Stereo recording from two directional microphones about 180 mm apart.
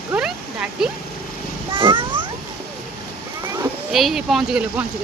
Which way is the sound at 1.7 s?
25° right (ahead or behind).